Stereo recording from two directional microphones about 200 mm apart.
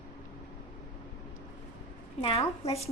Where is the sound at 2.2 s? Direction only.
30° left (ahead or behind).